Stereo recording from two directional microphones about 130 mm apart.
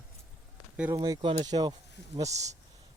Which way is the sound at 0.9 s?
25° right (ahead or behind).